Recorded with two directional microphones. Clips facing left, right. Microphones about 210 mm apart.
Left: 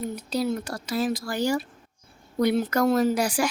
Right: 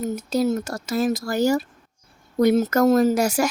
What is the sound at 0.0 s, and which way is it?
Speech, 45° right (ahead or behind).